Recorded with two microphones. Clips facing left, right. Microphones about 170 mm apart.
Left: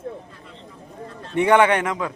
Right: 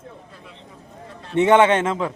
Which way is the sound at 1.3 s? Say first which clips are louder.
Right 2 dB; 20° right (ahead or behind).